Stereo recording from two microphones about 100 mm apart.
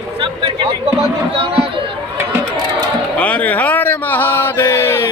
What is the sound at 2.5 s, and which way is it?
Chatter, 45° right (ahead or behind).